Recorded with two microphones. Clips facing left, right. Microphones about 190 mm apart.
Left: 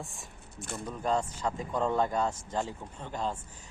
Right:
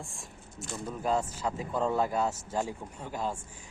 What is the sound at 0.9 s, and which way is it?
Speech, 5° right (ahead or behind).